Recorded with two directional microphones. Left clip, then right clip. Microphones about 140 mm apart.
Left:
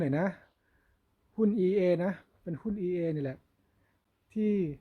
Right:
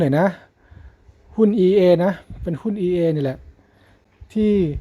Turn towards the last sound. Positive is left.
turn(degrees=-15)  # may be behind; listen again after turning